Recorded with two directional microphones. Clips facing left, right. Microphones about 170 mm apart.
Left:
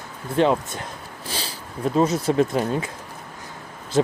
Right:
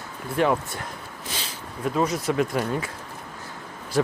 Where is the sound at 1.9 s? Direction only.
25° left (ahead or behind).